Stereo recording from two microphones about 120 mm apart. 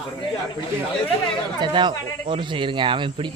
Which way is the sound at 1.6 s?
40° right (ahead or behind).